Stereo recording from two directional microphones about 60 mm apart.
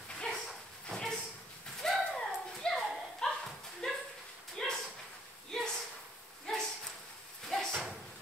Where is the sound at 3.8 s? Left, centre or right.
Centre.